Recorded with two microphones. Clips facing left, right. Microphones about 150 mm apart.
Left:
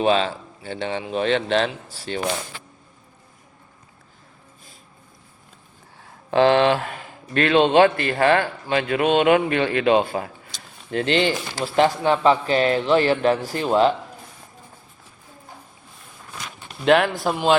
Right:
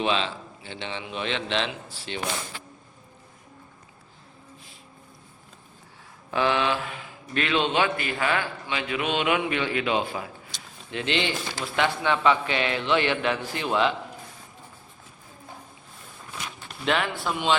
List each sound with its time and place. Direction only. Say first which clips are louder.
0.0 s a man's voice: left 7 dB; 45° left (ahead or behind)
6.3 s a man's voice: left 8 dB; 60° left (ahead or behind); by 13.9 s 40° left (ahead or behind)
16.8 s a man's voice: left 9 dB; 55° left (ahead or behind)
17.2 s a man's voice: left 6 dB; 40° left (ahead or behind)